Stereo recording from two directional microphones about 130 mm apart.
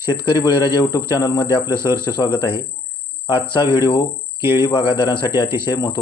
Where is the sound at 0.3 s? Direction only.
35° left (ahead or behind).